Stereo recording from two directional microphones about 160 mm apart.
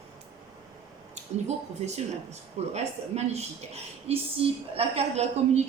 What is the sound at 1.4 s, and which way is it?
Speech, 45° right (ahead or behind).